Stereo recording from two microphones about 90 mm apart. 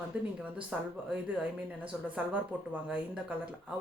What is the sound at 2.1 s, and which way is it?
Speech, 15° right (ahead or behind).